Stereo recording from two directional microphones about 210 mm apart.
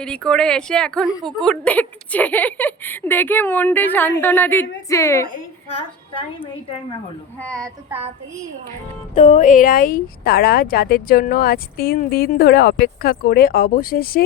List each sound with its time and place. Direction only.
0.0 s a woman's voice: 5° left (ahead or behind)
7.3 s speech: 5° left (ahead or behind)
7.9 s a woman's voice: 10° right (ahead or behind)
9.1 s speech: 35° left (ahead or behind)